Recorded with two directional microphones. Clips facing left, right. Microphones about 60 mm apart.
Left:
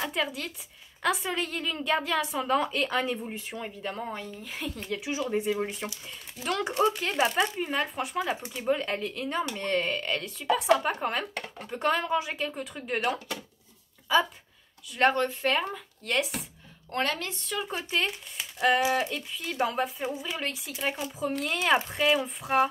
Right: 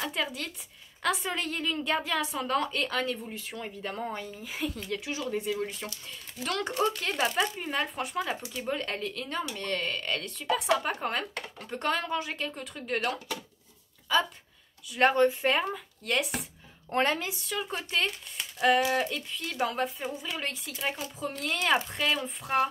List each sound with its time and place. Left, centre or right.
0.0 s speech: centre
3.3 s speech: left
3.5 s speech: centre
5.3 s speech: left
6.4 s speech: centre
16.9 s speech: centre